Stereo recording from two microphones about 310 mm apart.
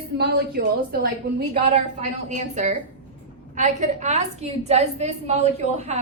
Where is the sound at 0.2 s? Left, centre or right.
Right.